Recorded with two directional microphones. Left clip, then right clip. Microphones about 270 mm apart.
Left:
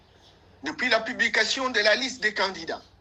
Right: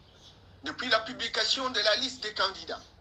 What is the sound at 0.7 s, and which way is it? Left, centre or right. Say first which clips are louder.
A man's voice: left 4 dB; left.